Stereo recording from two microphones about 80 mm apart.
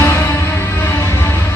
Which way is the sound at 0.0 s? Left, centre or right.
Left.